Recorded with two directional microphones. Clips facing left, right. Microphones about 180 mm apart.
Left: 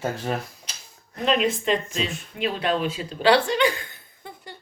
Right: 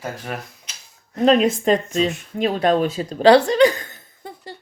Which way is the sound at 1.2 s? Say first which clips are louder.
Right 7 dB; 40° right (ahead or behind).